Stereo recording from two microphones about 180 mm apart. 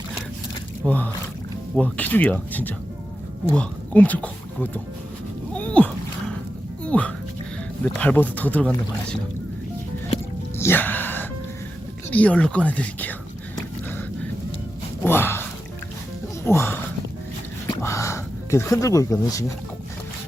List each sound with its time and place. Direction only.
0.9 s speech: 10° left (ahead or behind)
5.5 s boat: 5° left (ahead or behind)
6.8 s music: 10° left (ahead or behind)
7.9 s speech: 10° left (ahead or behind)
10.6 s a sound: 10° left (ahead or behind)
12.1 s speech: 10° left (ahead or behind)
15.0 s speech: 15° left (ahead or behind)
17.7 s a sound: 15° left (ahead or behind)